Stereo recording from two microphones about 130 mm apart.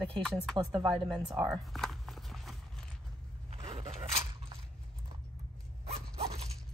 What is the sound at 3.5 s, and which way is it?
Vehicle, 45° right (ahead or behind).